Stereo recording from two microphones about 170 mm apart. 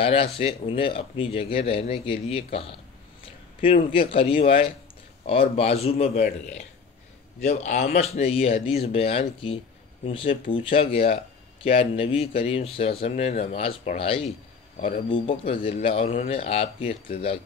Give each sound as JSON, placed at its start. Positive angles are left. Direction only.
{"t": 0.0, "sound": "a man's voice", "side_deg": 30}
{"t": 3.9, "sound": "a man's voice", "side_deg": 30}
{"t": 7.4, "sound": "a man's voice", "side_deg": 40}